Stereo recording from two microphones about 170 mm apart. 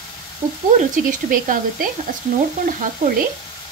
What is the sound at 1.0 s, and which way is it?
Sizzle, 55° right (ahead or behind).